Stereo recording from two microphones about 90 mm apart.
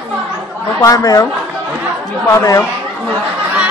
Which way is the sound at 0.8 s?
45° left (ahead or behind).